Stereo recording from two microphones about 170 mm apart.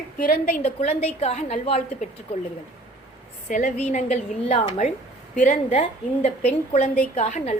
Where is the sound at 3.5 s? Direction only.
45° left (ahead or behind).